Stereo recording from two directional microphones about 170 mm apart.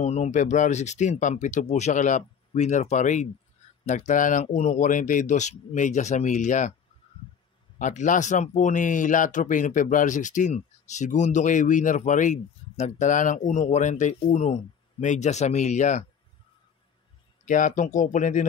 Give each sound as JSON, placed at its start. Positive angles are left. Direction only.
{"t": 0.0, "sound": "speech", "side_deg": 45}
{"t": 7.8, "sound": "speech", "side_deg": 45}
{"t": 17.5, "sound": "speech", "side_deg": 50}